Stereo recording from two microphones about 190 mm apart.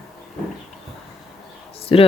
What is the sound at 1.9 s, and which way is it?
Speech, 30° left (ahead or behind).